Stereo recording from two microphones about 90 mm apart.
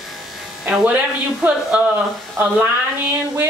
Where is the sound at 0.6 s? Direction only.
15° right (ahead or behind).